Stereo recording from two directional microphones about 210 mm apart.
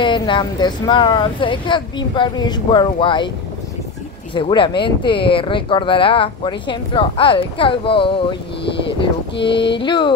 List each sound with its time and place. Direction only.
0.0 s speech: 20° left (ahead or behind)
4.3 s speech: 25° left (ahead or behind)
9.4 s speech: 25° left (ahead or behind)